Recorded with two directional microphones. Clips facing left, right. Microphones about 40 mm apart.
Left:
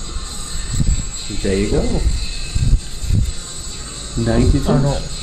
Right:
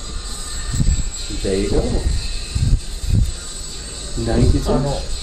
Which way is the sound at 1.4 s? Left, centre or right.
Left.